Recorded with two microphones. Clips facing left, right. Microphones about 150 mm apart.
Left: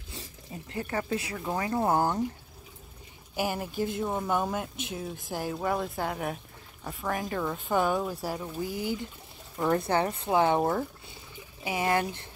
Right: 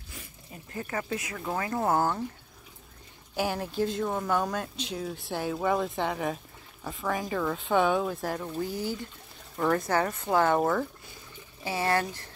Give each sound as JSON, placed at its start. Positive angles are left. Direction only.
{"t": 0.7, "sound": "speech", "side_deg": 30}
{"t": 1.6, "sound": "speech", "side_deg": 15}
{"t": 3.3, "sound": "speech", "side_deg": 10}
{"t": 9.7, "sound": "speech", "side_deg": 25}